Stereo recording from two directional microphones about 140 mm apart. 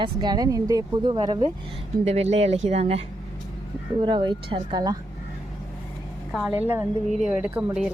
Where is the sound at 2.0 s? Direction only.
50° right (ahead or behind).